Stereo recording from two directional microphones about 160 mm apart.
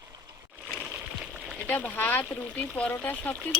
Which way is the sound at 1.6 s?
10° left (ahead or behind).